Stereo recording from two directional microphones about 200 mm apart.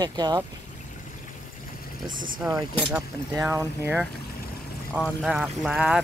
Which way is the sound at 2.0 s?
40° right (ahead or behind).